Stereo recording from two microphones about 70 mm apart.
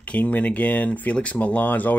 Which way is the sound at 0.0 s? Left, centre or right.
Left.